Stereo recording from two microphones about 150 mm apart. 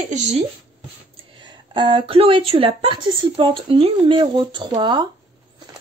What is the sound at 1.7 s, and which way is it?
A woman's voice, 35° right (ahead or behind).